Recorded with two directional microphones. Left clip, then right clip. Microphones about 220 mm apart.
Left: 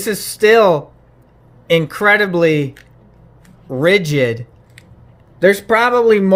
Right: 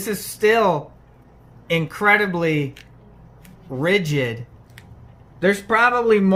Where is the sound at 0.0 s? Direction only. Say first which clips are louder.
Left 6 dB; 45° left (ahead or behind).